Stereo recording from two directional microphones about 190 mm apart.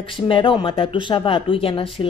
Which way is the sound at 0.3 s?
25° left (ahead or behind).